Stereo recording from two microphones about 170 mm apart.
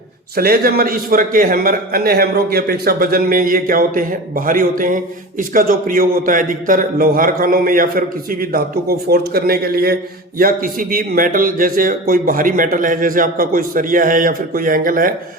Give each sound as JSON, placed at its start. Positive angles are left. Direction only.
{"t": 0.3, "sound": "a man's voice", "side_deg": -60}